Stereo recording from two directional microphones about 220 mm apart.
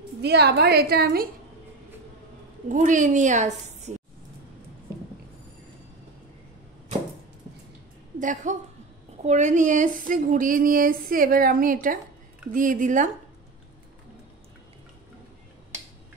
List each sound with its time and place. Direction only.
0.2 s a woman's voice: 50° right (ahead or behind)
2.7 s speech: 35° right (ahead or behind)
8.2 s speech: 35° right (ahead or behind)